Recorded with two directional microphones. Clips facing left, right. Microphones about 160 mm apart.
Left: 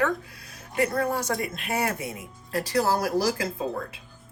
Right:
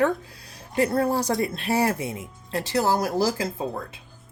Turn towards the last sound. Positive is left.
turn(degrees=-25)  # may be behind; listen again after turning